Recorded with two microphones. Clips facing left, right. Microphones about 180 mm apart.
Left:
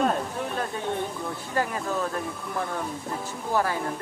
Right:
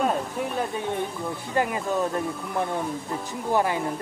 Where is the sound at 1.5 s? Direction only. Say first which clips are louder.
Right 3 dB; 20° right (ahead or behind).